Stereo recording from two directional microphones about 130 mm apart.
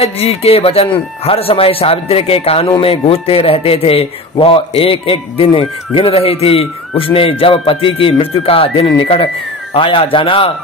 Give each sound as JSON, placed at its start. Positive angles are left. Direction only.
{"t": 0.0, "sound": "a man's voice", "side_deg": 50}